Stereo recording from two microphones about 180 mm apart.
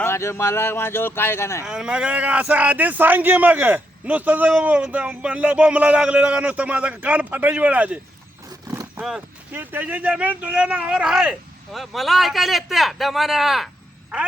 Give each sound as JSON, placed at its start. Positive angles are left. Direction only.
{"t": 0.0, "sound": "speech", "side_deg": 15}
{"t": 1.6, "sound": "a man's voice", "side_deg": -5}
{"t": 8.6, "sound": "roar", "side_deg": -20}
{"t": 9.0, "sound": "livestock", "side_deg": -5}
{"t": 9.6, "sound": "speech", "side_deg": -10}